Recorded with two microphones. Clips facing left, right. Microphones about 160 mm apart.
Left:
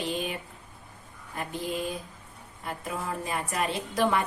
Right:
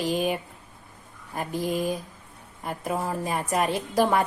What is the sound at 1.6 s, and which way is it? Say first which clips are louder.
Speech: right 6 dB; 40° right (ahead or behind).